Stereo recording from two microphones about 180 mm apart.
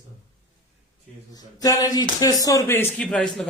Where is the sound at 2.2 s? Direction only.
20° left (ahead or behind).